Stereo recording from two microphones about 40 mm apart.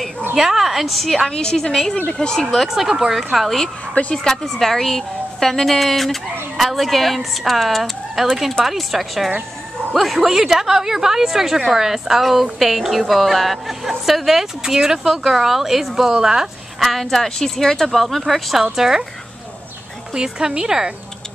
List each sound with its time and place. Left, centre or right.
0.4 s a woman's voice: centre
1.3 s speech: centre
2.5 s a woman's voice: centre
3.3 s a woman's voice: centre
4.1 s a woman's voice: centre
16.8 s a woman's voice: centre
18.6 s a woman's voice: centre
20.2 s a woman's voice: centre